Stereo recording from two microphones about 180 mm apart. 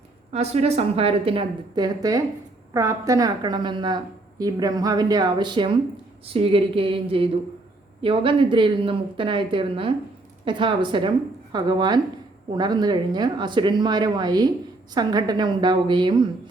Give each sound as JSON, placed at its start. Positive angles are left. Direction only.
{"t": 0.3, "sound": "a woman's voice", "side_deg": -35}
{"t": 6.2, "sound": "a sound", "side_deg": -30}
{"t": 8.0, "sound": "a woman's voice", "side_deg": -30}